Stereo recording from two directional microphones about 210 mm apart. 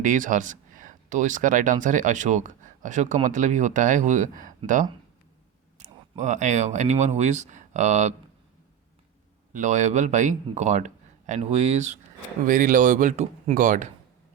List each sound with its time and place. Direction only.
0.0 s speech: 40° right (ahead or behind)
9.5 s speech: 35° right (ahead or behind)